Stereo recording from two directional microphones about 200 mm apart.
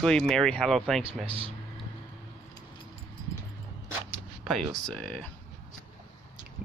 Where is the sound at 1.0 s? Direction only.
30° right (ahead or behind).